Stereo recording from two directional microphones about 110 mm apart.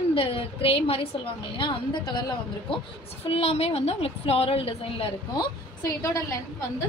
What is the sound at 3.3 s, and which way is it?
A woman's voice, 65° left (ahead or behind).